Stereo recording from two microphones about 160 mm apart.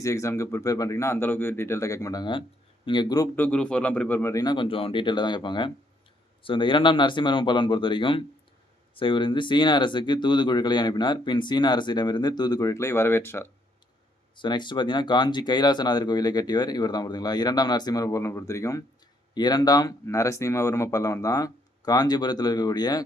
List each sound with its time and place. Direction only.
0.0 s speech: 20° left (ahead or behind)
3.3 s speech: 10° left (ahead or behind)
14.3 s speech: 30° left (ahead or behind)